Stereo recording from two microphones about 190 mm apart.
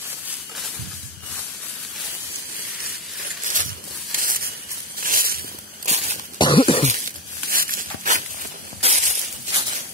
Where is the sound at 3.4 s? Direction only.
45° right (ahead or behind).